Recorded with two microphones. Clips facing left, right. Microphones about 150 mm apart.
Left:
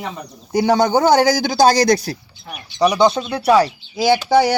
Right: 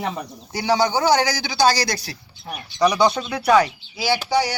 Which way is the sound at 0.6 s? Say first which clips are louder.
Left 4 dB; 50° left (ahead or behind).